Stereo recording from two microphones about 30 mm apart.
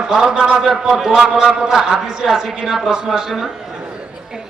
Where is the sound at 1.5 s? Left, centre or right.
Right.